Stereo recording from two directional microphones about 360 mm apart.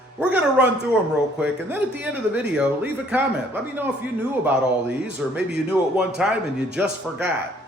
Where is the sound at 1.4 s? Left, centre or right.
Centre.